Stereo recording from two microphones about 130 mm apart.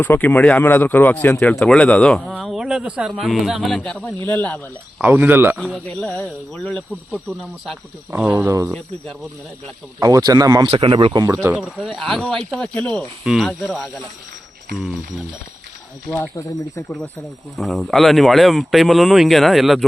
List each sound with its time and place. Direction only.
0.0 s speech: 15° left (ahead or behind)
5.0 s speech: 15° right (ahead or behind)
5.5 s speech: centre (ahead or behind)
5.8 s speech: 10° left (ahead or behind); by 8.4 s 10° right (ahead or behind)
8.4 s speech: 25° right (ahead or behind)
10.0 s speech: 30° right (ahead or behind)
10.7 s speech: 45° right (ahead or behind)
11.4 s speech: 10° right (ahead or behind); by 13.1 s 10° left (ahead or behind)
13.2 s speech: centre (ahead or behind)
17.6 s speech: centre (ahead or behind)